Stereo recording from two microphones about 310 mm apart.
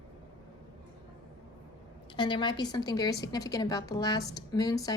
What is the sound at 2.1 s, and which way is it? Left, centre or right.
A woman's voice, centre.